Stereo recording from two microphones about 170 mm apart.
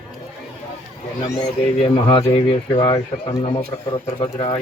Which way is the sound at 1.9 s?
30° left (ahead or behind).